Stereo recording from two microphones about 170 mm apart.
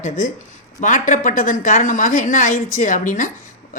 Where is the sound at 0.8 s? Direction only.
50° left (ahead or behind).